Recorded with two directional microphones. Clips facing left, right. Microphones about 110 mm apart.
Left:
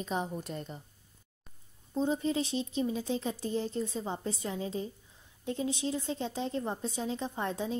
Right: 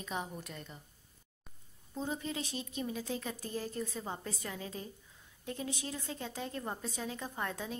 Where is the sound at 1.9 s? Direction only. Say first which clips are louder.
Left 8 dB; 30° left (ahead or behind).